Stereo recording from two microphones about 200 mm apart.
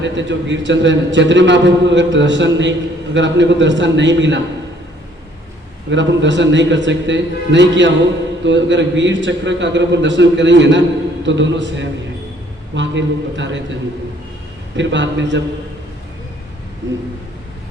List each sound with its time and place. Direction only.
0.0 s a man's voice: 65° right (ahead or behind)
5.9 s a man's voice: 65° right (ahead or behind)
14.8 s a man's voice: 65° right (ahead or behind)